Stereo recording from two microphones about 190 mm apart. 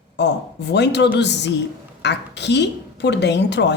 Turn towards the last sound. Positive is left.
turn(degrees=65)  # may be behind; listen again after turning